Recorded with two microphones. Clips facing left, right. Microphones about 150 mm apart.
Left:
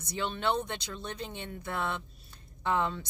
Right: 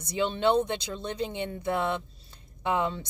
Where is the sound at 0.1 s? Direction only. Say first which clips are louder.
Right 7 dB; 20° right (ahead or behind).